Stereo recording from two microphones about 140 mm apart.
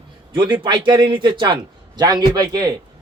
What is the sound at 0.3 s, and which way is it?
A man's voice, 35° right (ahead or behind).